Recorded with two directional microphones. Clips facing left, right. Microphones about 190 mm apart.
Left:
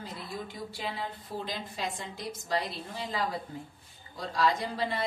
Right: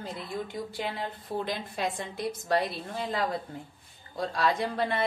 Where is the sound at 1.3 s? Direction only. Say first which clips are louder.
Right 7 dB; 60° right (ahead or behind).